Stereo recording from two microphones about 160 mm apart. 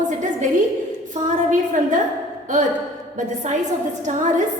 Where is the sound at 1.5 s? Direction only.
50° right (ahead or behind).